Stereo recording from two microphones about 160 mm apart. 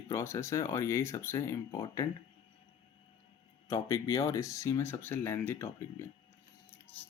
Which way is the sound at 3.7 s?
20° left (ahead or behind).